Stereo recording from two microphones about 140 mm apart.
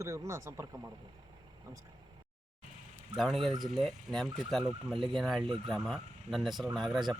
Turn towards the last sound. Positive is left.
turn(degrees=0)  # may be behind; listen again after turning